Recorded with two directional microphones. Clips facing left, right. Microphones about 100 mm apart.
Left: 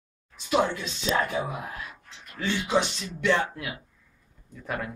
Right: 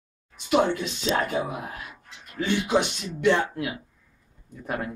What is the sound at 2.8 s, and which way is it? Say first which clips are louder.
Speech: right 5 dB; 15° right (ahead or behind).